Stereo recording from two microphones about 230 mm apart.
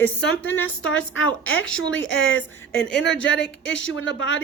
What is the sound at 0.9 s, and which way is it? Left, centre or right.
A woman's voice, left.